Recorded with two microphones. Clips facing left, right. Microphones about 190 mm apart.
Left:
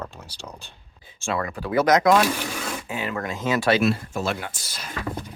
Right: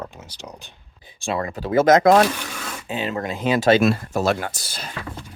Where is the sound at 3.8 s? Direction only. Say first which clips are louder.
Right 3 dB; 60° right (ahead or behind).